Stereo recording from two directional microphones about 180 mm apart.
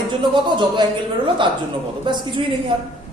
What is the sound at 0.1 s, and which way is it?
A woman's voice, 25° right (ahead or behind).